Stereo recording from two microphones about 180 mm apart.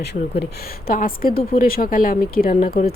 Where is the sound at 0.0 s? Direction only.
65° left (ahead or behind).